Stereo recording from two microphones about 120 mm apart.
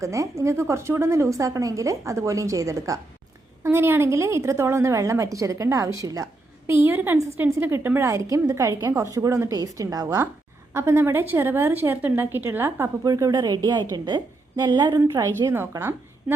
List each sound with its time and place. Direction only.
0.0 s a woman's voice: 25° right (ahead or behind)
13.1 s a woman's voice: 30° right (ahead or behind)